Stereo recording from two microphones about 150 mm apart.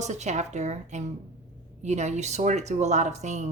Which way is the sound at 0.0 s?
50° right (ahead or behind).